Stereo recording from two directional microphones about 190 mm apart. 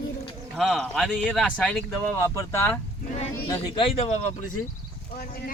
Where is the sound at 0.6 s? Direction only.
Centre (ahead or behind).